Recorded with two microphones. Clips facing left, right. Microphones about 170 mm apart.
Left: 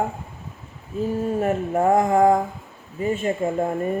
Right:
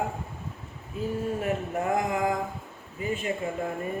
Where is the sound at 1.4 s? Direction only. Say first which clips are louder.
Left 8 dB; 45° left (ahead or behind).